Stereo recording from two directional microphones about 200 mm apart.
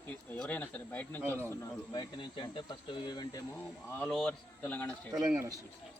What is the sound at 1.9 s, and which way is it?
Speech, 20° left (ahead or behind).